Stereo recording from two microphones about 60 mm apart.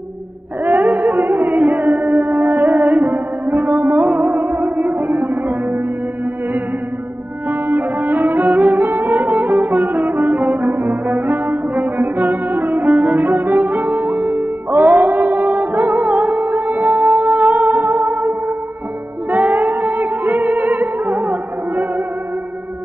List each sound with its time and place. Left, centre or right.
0.7 s music: right
7.4 s music: right
19.3 s music: right